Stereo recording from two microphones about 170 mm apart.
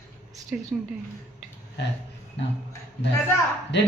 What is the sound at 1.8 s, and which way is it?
Speech, 85° left.